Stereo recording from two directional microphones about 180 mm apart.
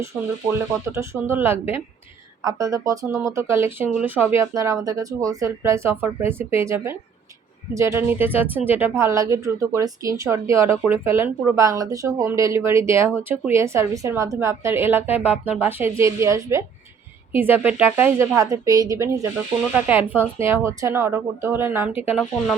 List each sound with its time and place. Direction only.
0.1 s speech: 5° right (ahead or behind)
0.9 s speech: 15° right (ahead or behind)